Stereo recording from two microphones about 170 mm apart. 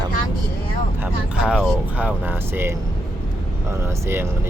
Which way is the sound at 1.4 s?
5° right (ahead or behind).